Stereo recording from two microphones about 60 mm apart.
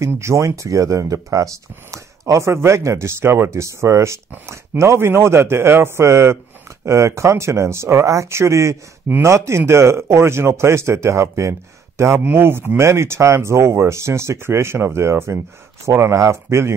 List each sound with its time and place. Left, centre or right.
0.0 s speech: right
3.4 s speech: right
12.3 s speech: right
15.9 s speech: right